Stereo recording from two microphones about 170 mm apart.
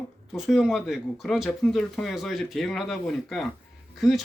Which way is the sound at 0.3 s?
Centre (ahead or behind).